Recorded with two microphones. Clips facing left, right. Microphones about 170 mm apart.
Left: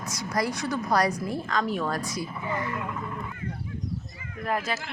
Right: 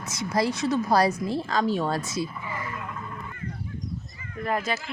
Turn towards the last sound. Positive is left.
turn(degrees=0)  # may be behind; listen again after turning